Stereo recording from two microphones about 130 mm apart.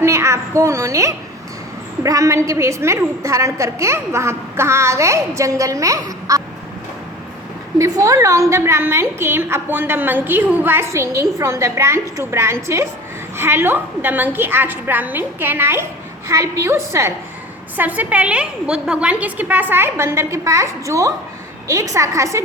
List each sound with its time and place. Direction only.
0.0 s a woman's voice: 20° right (ahead or behind)
7.8 s a woman's voice: 25° right (ahead or behind)